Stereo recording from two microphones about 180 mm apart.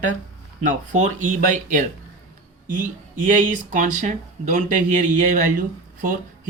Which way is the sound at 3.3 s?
45° right (ahead or behind).